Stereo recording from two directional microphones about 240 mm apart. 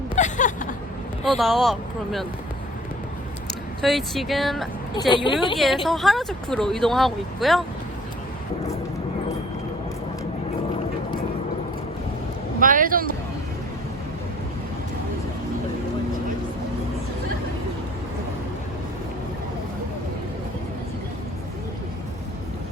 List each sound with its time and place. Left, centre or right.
0.2 s a sound: left
1.2 s speech: centre
3.8 s speech: centre
4.9 s a woman's voice: centre
5.5 s speech: centre
12.5 s speech: right